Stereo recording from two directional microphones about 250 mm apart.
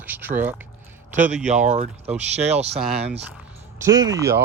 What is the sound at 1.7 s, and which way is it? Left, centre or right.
Speech, right.